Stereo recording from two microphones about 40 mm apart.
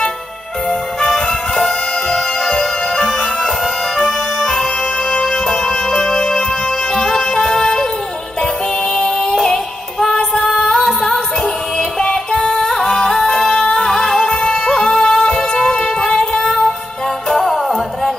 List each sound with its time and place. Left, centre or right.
1.1 s music: centre
8.9 s music: centre
9.9 s female singing: centre
10.8 s music: centre
12.0 s music: centre
13.3 s singing: centre
13.6 s singing: left
13.8 s music: centre